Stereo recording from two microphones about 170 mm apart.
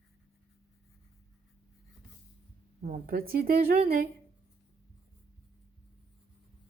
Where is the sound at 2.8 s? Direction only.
55° right (ahead or behind).